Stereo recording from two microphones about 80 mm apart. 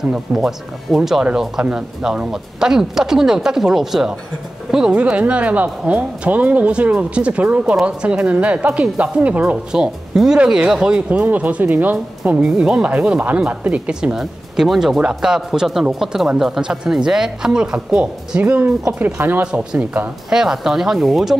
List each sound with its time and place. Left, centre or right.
0.1 s a man's voice: centre; by 19.4 s right
19.4 s a man's voice: centre